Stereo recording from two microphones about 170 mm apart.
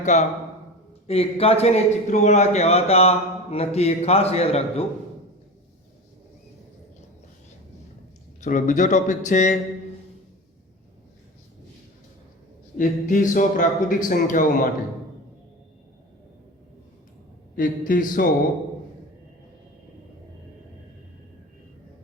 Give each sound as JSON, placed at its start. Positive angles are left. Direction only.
{"t": 0.0, "sound": "a man's voice", "side_deg": 45}
{"t": 8.4, "sound": "speech", "side_deg": 45}
{"t": 12.7, "sound": "speech", "side_deg": 50}
{"t": 17.6, "sound": "a man's voice", "side_deg": 55}